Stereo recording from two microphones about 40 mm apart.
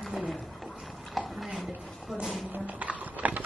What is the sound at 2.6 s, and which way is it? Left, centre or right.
Horse, right.